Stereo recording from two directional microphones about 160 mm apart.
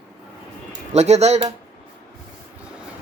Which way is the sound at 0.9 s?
45° right (ahead or behind).